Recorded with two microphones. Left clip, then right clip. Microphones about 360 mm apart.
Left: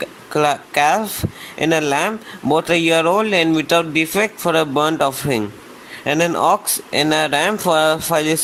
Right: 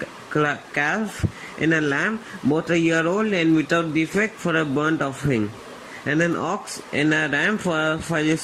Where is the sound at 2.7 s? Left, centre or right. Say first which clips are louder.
Left 6 dB; left.